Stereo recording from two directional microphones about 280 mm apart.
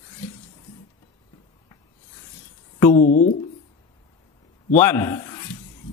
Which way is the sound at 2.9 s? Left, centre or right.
Left.